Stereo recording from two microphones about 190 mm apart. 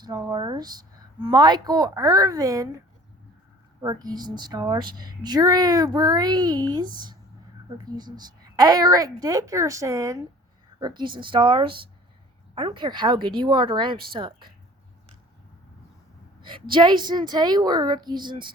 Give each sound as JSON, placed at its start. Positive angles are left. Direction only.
{"t": 0.0, "sound": "speech", "side_deg": -20}
{"t": 16.4, "sound": "a sound", "side_deg": -25}
{"t": 16.7, "sound": "speech", "side_deg": -25}